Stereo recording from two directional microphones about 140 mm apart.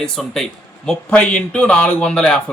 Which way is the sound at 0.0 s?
5° left (ahead or behind).